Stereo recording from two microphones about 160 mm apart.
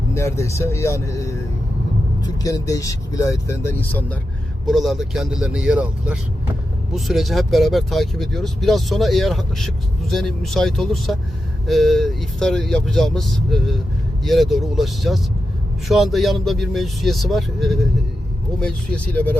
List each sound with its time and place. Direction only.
0.1 s speech: 15° left (ahead or behind)
4.6 s speech: centre (ahead or behind)